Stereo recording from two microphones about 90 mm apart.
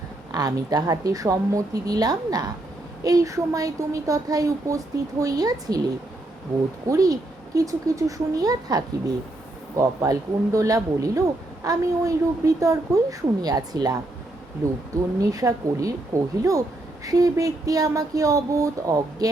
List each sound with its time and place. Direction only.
0.3 s a woman's voice: 45° right (ahead or behind)
6.8 s a woman's voice: 40° right (ahead or behind)
14.6 s a woman's voice: 35° right (ahead or behind)